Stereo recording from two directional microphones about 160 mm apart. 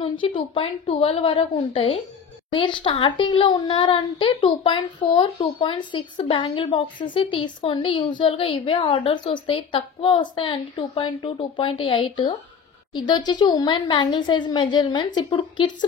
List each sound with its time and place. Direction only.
0.2 s speech: 35° left (ahead or behind)